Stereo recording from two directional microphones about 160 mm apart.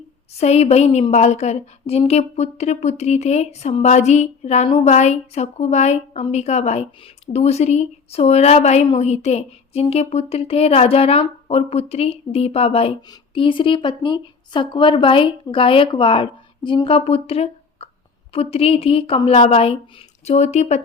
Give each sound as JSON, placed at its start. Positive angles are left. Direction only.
{"t": 0.3, "sound": "a woman's voice", "side_deg": 40}